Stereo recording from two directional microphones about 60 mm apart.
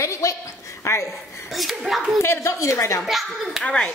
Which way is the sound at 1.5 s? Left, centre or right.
Centre.